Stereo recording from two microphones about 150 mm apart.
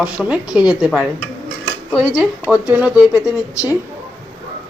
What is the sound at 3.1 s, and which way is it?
Speech, 20° left (ahead or behind).